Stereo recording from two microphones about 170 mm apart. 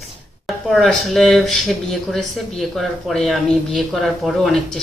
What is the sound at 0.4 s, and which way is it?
Speech, centre (ahead or behind).